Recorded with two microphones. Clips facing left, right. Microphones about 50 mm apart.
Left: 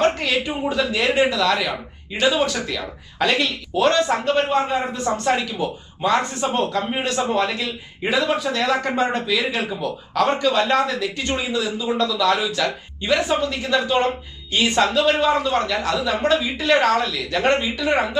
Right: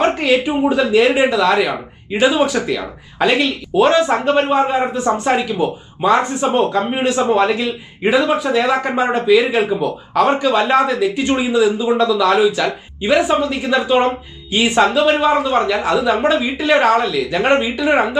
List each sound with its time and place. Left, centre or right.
0.0 s speech: centre
0.9 s speech: centre